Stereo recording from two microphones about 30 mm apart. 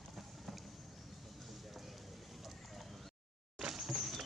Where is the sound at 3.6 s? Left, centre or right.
Centre.